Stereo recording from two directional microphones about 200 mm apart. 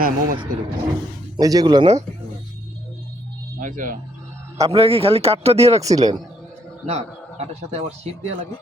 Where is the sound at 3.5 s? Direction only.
40° right (ahead or behind).